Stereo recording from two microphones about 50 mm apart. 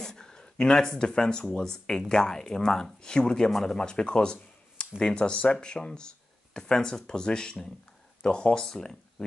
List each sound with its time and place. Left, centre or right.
0.0 s speech: centre